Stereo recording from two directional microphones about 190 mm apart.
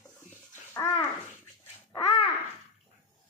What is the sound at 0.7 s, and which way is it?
Speech, 15° left (ahead or behind).